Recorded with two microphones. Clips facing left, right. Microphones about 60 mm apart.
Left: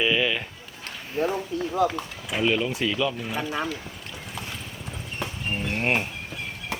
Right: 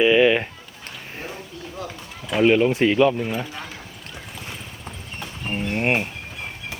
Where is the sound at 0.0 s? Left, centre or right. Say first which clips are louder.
Right 8 dB; centre.